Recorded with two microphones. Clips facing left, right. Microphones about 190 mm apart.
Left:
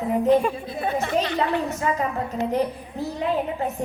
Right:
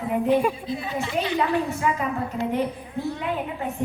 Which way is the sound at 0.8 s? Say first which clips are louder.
Left 5 dB; 55° left (ahead or behind).